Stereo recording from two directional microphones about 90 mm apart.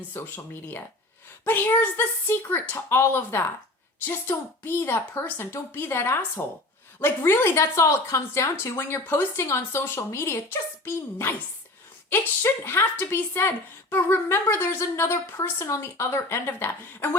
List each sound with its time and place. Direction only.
0.1 s speech: 25° left (ahead or behind)